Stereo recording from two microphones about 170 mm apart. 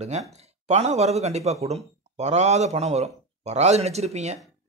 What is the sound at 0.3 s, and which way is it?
Speech, 40° right (ahead or behind).